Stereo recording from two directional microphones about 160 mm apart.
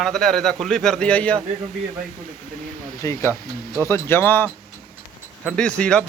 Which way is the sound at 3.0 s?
20° left (ahead or behind).